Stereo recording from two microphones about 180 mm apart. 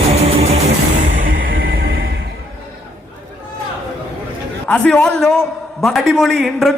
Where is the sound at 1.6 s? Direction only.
55° right (ahead or behind).